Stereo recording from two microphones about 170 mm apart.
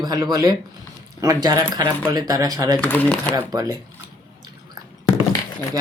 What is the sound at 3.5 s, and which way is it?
Speech, 20° right (ahead or behind).